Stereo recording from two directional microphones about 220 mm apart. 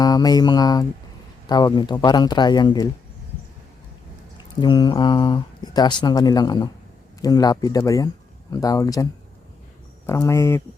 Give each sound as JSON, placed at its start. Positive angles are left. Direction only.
{"t": 0.0, "sound": "speech", "side_deg": 15}
{"t": 4.6, "sound": "speech", "side_deg": 20}
{"t": 10.1, "sound": "speech", "side_deg": 15}